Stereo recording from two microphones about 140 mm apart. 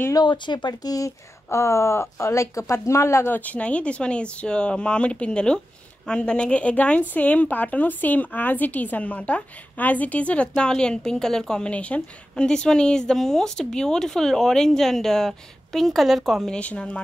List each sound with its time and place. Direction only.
0.1 s a woman's voice: 30° left (ahead or behind); by 17.0 s 5° left (ahead or behind)